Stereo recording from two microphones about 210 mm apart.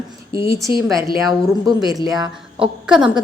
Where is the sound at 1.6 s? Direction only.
15° right (ahead or behind).